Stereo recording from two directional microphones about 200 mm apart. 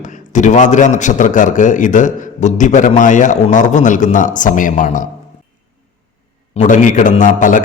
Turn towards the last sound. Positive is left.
turn(degrees=40)  # may be behind; listen again after turning